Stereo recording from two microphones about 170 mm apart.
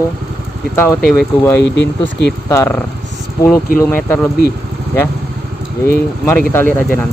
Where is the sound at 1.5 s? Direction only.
90° left.